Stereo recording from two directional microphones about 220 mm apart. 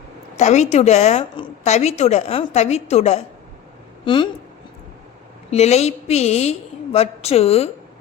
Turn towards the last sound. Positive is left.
turn(degrees=30)  # may be behind; listen again after turning